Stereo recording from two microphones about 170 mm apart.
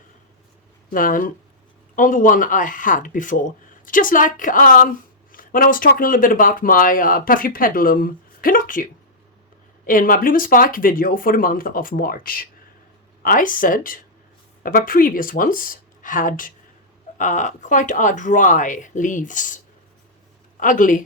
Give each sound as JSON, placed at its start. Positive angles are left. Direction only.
{"t": 0.9, "sound": "a woman's voice", "side_deg": 55}
{"t": 9.8, "sound": "a woman's voice", "side_deg": 55}
{"t": 20.6, "sound": "speech", "side_deg": 50}